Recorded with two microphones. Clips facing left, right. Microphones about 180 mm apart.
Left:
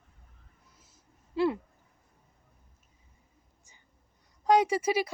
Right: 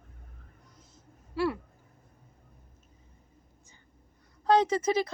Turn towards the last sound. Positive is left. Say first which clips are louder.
# even
turn(degrees=10)  # may be behind; listen again after turning